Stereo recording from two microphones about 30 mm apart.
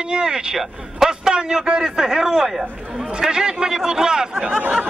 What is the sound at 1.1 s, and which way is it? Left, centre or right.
A man's voice, right.